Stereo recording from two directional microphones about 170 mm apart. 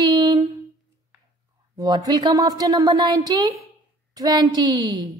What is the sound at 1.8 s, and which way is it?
Speech, 25° right (ahead or behind).